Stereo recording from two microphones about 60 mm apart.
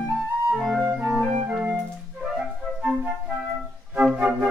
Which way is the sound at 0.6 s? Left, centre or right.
Centre.